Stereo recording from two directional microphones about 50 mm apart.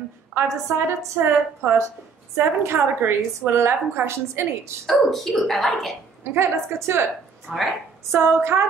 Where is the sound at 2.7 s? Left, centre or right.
Right.